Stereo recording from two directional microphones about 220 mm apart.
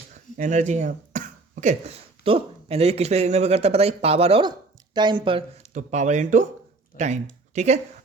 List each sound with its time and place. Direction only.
0.1 s speech: 35° right (ahead or behind)
5.7 s speech: 35° right (ahead or behind)